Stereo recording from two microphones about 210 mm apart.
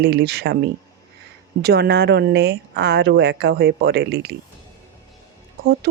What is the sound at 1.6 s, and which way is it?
Speech, 50° right (ahead or behind).